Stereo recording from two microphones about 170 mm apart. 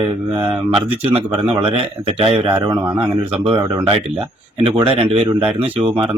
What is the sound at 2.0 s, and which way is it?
Speech, 30° right (ahead or behind).